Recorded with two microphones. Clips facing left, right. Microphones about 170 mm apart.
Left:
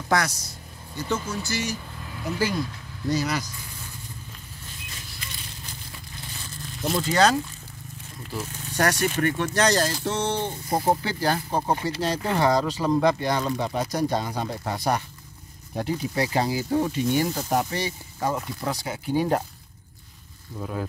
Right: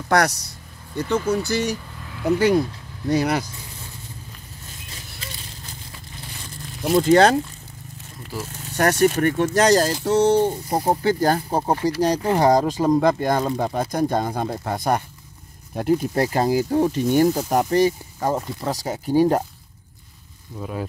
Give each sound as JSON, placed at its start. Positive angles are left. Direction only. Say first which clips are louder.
{"t": 0.1, "sound": "speech", "louder": "right 5 dB", "side_deg": -65}
{"t": 7.0, "sound": "speech", "louder": "right 7 dB", "side_deg": -55}
{"t": 8.8, "sound": "speech", "louder": "right 6 dB", "side_deg": -45}
{"t": 20.5, "sound": "speech", "louder": "right 1 dB", "side_deg": -15}